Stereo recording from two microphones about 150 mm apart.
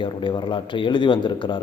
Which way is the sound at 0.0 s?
35° left (ahead or behind).